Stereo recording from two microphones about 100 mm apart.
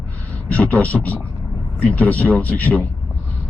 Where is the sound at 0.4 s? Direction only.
15° left (ahead or behind).